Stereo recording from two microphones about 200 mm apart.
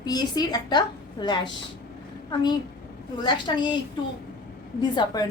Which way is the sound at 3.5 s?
25° left (ahead or behind).